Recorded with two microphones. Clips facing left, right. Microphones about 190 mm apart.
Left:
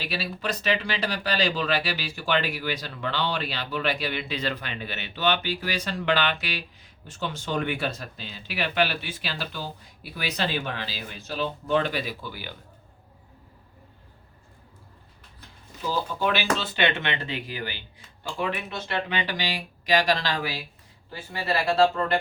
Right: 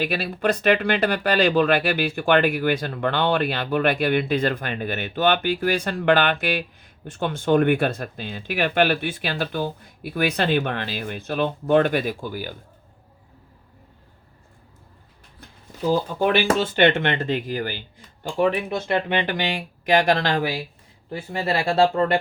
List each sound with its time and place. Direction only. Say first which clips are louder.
0.0 s speech: right 8 dB; 55° right (ahead or behind)
15.9 s speech: right 6 dB; 55° right (ahead or behind)